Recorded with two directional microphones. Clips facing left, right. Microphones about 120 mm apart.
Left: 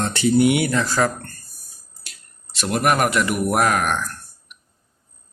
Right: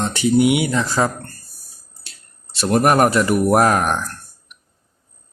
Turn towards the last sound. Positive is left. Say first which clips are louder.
# right 3 dB
turn(degrees=-35)  # may be behind; listen again after turning